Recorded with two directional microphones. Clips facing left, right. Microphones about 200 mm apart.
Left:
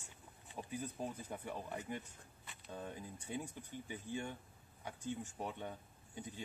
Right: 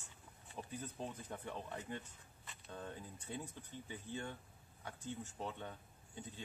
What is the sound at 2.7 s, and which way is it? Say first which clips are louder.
Speech: left 2 dB; 10° left (ahead or behind).